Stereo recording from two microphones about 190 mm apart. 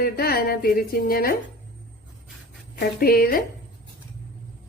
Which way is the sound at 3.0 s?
50° left (ahead or behind).